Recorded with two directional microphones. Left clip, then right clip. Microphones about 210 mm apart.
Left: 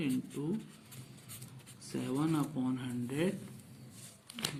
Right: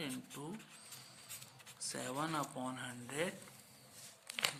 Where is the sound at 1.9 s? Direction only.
25° right (ahead or behind).